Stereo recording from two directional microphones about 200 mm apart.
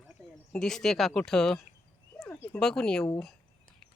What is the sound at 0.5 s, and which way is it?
Speech, 5° left (ahead or behind).